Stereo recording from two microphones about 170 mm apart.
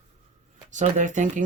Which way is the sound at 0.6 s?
45° right (ahead or behind).